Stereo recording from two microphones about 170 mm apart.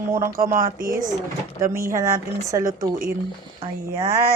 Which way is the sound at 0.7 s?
55° right (ahead or behind).